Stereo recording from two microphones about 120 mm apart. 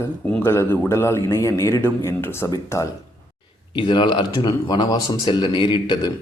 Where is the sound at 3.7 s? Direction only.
45° left (ahead or behind).